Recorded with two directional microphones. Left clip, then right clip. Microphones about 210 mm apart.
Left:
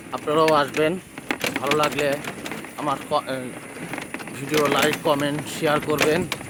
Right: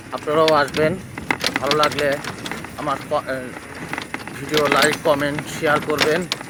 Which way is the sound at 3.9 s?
30° right (ahead or behind).